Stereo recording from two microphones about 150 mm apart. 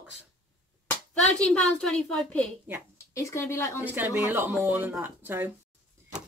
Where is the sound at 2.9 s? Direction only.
20° left (ahead or behind).